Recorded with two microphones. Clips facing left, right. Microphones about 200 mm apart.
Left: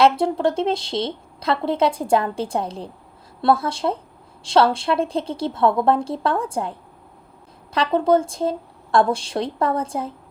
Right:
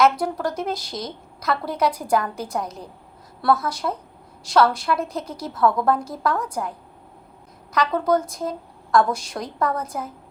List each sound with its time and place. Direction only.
0.0 s a woman's voice: 25° left (ahead or behind)